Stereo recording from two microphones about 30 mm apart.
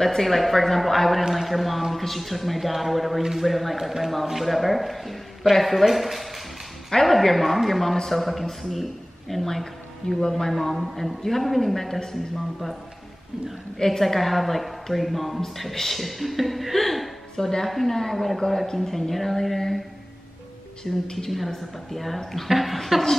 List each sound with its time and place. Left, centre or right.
0.0 s a woman's voice: centre
6.9 s a woman's voice: centre
10.0 s speech: left
10.5 s a woman's voice: centre
13.7 s speech: centre
14.0 s a woman's voice: centre
17.4 s a woman's voice: centre
18.7 s speech: centre
18.9 s a woman's voice: centre
20.8 s speech: centre
21.5 s a woman's voice: centre